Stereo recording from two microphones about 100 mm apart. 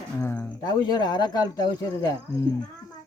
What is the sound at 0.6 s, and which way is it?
Speech, 40° left (ahead or behind).